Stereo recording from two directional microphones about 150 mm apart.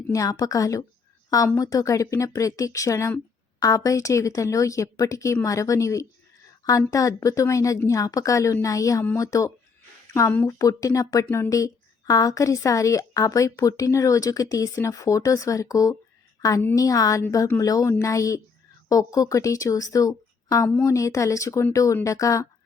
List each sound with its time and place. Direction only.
0.1 s speech: 25° left (ahead or behind)